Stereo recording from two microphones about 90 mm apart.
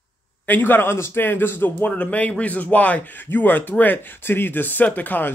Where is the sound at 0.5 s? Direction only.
20° left (ahead or behind).